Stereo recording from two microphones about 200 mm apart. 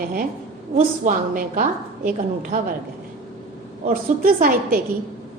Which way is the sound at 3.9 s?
45° right (ahead or behind).